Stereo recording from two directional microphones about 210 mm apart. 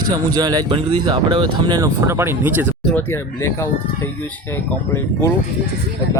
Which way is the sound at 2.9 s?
10° left (ahead or behind).